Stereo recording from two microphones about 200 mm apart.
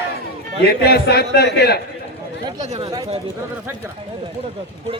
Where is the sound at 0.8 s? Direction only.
55° left (ahead or behind).